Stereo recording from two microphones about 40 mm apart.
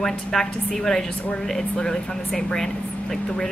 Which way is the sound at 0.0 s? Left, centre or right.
Centre.